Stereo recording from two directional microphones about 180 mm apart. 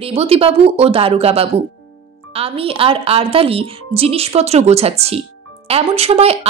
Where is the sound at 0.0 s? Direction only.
35° right (ahead or behind).